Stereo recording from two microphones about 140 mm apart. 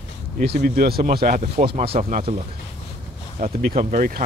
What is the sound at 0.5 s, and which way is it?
A man's voice, 90° right.